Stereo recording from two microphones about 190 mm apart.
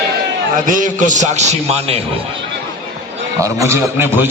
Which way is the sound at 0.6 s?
45° right (ahead or behind).